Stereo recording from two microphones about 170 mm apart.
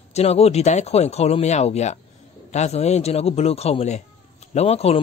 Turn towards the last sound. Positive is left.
turn(degrees=35)  # may be behind; listen again after turning